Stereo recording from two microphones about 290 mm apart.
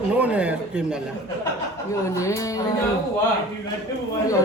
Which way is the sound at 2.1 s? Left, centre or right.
Centre.